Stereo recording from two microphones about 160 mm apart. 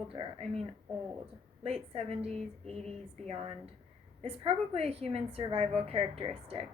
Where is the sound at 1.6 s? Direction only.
40° right (ahead or behind).